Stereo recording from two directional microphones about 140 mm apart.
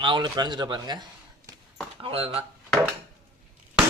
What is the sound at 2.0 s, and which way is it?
Speech, 40° right (ahead or behind).